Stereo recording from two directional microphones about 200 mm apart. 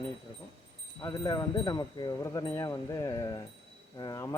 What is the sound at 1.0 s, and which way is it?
Speech, 15° left (ahead or behind).